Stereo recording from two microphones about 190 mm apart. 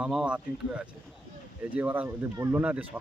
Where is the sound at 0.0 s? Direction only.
5° right (ahead or behind).